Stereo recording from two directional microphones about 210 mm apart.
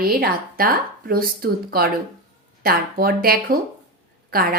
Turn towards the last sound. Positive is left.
turn(degrees=-45)  # may be behind; listen again after turning